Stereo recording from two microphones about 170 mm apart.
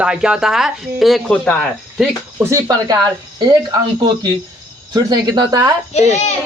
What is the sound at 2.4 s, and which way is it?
Speech, 15° right (ahead or behind).